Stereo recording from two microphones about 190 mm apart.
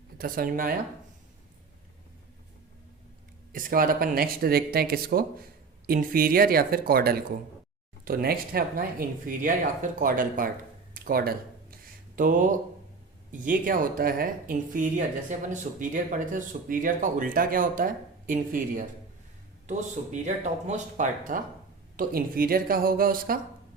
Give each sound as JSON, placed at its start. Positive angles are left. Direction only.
{"t": 0.2, "sound": "speech", "side_deg": -50}
{"t": 3.5, "sound": "speech", "side_deg": -45}
{"t": 10.9, "sound": "a sound", "side_deg": -50}
{"t": 13.3, "sound": "speech", "side_deg": -45}
{"t": 20.2, "sound": "speech", "side_deg": -40}